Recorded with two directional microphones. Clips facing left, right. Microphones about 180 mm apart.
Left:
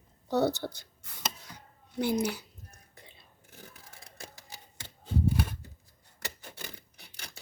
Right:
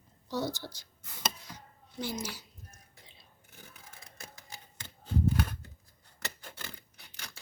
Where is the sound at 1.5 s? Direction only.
60° left (ahead or behind).